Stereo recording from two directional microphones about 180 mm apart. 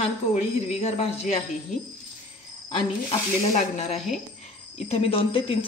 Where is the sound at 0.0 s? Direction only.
35° left (ahead or behind).